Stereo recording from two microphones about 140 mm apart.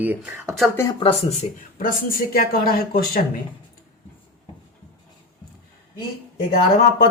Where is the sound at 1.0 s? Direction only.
45° left (ahead or behind).